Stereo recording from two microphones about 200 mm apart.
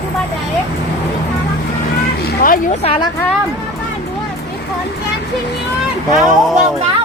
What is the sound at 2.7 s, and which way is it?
Speech, 30° left (ahead or behind).